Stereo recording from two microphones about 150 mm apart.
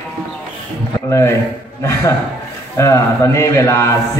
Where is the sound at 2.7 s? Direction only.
20° left (ahead or behind).